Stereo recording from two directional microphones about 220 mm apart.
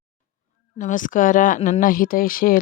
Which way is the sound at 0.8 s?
35° left (ahead or behind).